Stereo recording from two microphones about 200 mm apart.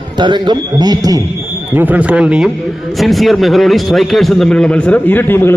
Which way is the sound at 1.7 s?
10° right (ahead or behind).